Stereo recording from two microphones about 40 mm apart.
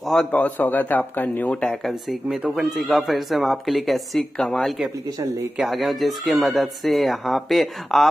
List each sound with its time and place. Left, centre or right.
0.3 s speech: left
2.5 s speech: centre
4.4 s speech: centre
5.7 s speech: centre